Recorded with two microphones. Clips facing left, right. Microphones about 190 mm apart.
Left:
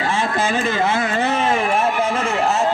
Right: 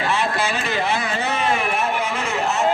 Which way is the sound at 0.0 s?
45° left (ahead or behind).